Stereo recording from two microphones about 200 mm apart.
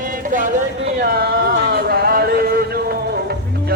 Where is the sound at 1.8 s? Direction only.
50° right (ahead or behind).